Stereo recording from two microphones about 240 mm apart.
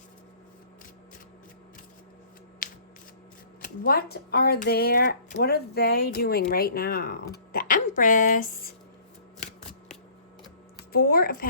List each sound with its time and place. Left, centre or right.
2.6 s scissors: left
3.6 s speech: left
10.9 s speech: left